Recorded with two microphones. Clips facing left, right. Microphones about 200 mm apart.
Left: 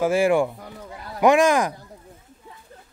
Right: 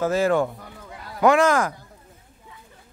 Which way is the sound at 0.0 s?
10° left (ahead or behind).